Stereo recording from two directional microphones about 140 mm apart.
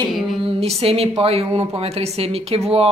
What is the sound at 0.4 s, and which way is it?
A woman's voice, 45° right (ahead or behind).